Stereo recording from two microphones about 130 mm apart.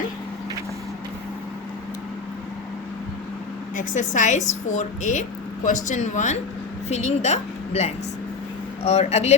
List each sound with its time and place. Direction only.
3.8 s a woman's voice: 75° left (ahead or behind); by 9.3 s 60° left (ahead or behind)